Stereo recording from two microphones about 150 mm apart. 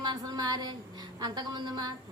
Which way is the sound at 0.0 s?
25° right (ahead or behind).